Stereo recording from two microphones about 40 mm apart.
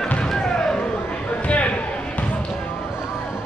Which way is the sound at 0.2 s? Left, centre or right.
Centre.